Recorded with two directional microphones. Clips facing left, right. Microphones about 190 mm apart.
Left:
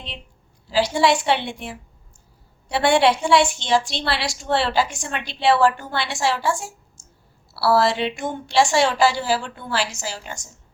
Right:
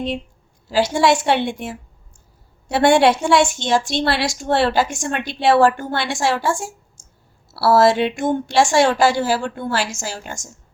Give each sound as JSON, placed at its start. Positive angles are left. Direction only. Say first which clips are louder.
{"t": 0.7, "sound": "a woman's voice", "louder": "right 2 dB", "side_deg": -50}